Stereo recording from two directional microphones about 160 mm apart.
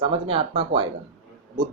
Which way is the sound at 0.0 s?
35° right (ahead or behind).